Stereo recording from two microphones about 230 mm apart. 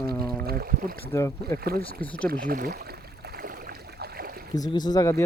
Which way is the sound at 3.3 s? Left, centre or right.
Right.